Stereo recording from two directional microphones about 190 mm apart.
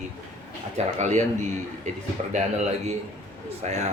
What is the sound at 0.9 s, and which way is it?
Speech, 40° right (ahead or behind).